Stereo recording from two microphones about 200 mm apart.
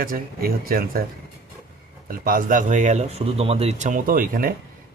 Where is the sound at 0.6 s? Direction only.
45° right (ahead or behind).